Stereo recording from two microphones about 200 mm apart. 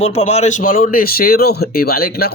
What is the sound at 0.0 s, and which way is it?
A man's voice, 30° left (ahead or behind).